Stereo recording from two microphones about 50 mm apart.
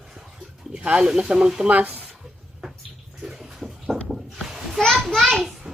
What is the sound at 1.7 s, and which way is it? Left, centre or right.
Speech, right.